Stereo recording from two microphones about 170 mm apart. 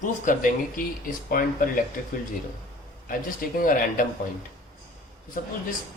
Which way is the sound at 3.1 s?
55° left (ahead or behind).